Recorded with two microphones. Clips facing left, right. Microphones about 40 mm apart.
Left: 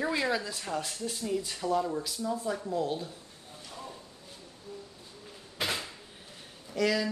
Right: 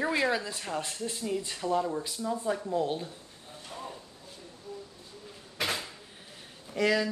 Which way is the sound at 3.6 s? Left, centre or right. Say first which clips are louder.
Right 3 dB; right.